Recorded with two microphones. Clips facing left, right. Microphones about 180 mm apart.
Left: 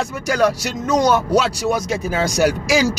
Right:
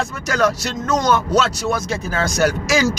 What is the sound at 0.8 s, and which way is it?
Speech, 10° left (ahead or behind).